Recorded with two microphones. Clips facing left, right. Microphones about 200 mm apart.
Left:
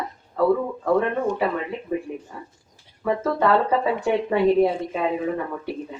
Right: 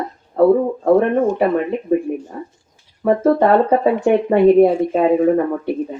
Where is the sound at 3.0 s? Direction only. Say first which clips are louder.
Right 8 dB; 45° right (ahead or behind).